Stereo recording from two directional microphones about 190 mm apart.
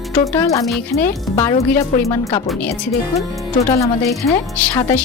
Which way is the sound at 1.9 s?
40° left (ahead or behind).